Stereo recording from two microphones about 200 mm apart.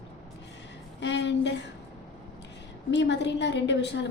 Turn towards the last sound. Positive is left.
turn(degrees=60)  # may be behind; listen again after turning